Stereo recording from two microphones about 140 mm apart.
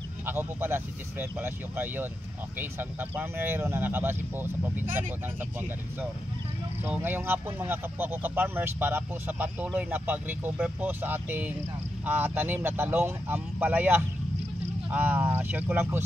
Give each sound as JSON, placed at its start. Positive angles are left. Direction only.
{"t": 0.2, "sound": "speech", "side_deg": -15}
{"t": 6.8, "sound": "speech", "side_deg": -15}